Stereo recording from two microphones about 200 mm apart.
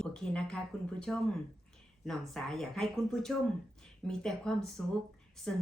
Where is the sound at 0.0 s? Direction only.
5° left (ahead or behind).